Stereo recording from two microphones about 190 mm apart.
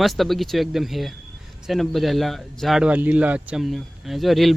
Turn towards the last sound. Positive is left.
turn(degrees=0)  # may be behind; listen again after turning